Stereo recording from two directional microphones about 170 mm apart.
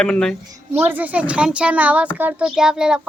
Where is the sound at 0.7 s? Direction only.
10° right (ahead or behind).